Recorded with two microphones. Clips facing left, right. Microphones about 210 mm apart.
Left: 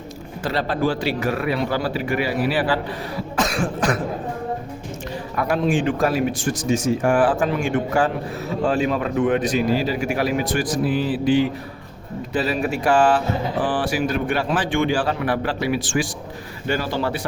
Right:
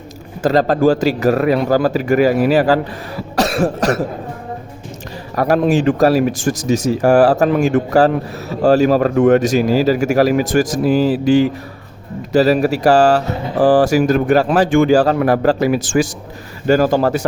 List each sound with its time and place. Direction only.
0.4 s speech: 45° right (ahead or behind)
3.3 s cough: 40° right (ahead or behind)
5.3 s speech: 40° right (ahead or behind)